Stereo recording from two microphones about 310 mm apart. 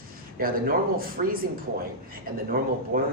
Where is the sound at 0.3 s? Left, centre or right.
Right.